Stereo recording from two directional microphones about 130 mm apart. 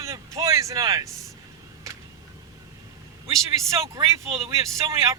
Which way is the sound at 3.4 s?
25° right (ahead or behind).